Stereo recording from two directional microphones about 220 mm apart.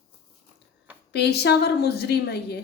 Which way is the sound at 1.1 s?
50° left (ahead or behind).